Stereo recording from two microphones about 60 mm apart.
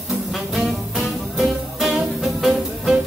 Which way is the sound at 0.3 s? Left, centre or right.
Centre.